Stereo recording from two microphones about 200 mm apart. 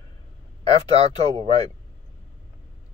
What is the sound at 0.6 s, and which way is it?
Speech, 30° right (ahead or behind).